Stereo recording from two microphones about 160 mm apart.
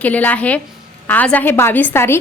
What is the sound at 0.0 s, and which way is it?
A woman's voice, 10° left (ahead or behind).